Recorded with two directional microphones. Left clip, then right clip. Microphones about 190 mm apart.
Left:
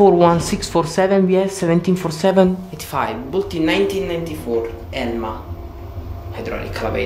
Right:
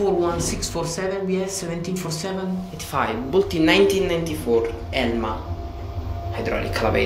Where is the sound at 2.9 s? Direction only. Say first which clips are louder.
Left 2 dB; 10° left (ahead or behind).